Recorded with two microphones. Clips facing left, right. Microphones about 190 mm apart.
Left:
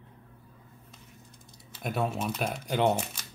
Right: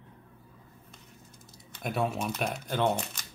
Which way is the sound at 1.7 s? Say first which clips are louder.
Even; centre (ahead or behind).